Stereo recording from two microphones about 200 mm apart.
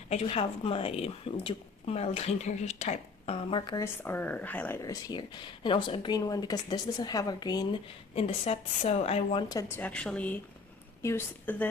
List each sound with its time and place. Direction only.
0.1 s speech: 30° left (ahead or behind)
4.0 s speech: 10° left (ahead or behind); by 9.4 s 30° left (ahead or behind)
9.5 s speech: 15° left (ahead or behind)